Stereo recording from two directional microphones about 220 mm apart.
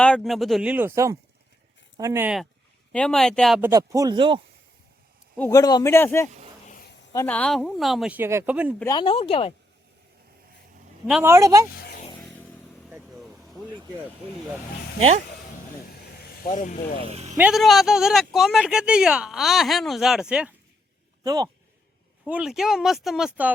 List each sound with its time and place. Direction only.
0.0 s speech: 5° left (ahead or behind)
3.6 s speech: 15° right (ahead or behind)
5.4 s a man's voice: 15° left (ahead or behind); by 8.7 s 5° right (ahead or behind)
8.8 s speech: 20° left (ahead or behind)
11.0 s speech: 10° right (ahead or behind)
11.8 s vehicle: 45° left (ahead or behind)
16.5 s speech: 35° left (ahead or behind)
17.0 s speech: 30° right (ahead or behind)
17.3 s speech: 5° right (ahead or behind)
21.2 s speech: 15° right (ahead or behind)
22.2 s speech: 5° right (ahead or behind)